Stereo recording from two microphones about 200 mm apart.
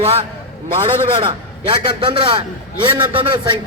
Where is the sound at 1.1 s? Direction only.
25° right (ahead or behind).